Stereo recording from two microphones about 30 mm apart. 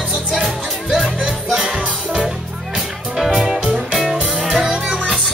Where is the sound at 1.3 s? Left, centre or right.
Right.